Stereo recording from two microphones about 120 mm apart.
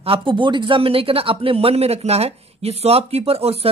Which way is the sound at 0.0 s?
45° right (ahead or behind).